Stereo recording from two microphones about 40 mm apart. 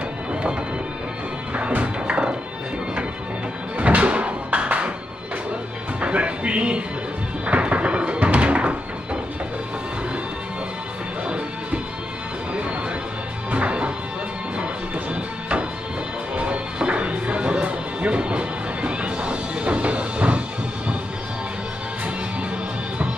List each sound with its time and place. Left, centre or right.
0.3 s music: right
2.0 s music: right
3.7 s music: right
5.9 s music: right
7.4 s a sound: right
11.2 s music: right
13.5 s music: right
16.3 s music: right